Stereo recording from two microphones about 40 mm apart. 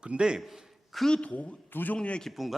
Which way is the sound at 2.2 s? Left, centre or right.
Centre.